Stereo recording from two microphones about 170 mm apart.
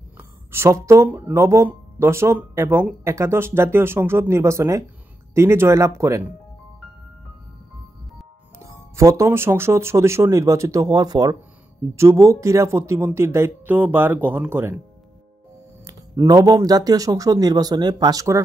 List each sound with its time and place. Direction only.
0.2 s speech: 15° right (ahead or behind)
8.6 s speech: 15° right (ahead or behind)
15.8 s speech: 20° right (ahead or behind)